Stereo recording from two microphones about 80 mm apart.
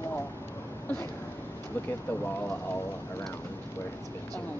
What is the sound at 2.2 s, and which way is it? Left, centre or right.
Speech, left.